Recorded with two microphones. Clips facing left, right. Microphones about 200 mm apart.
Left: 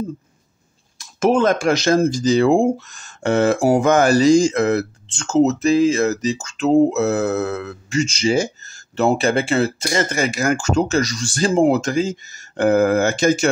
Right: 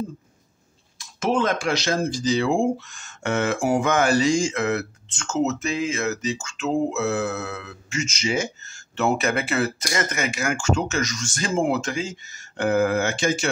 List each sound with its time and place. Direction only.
0.9 s speech: 45° left (ahead or behind)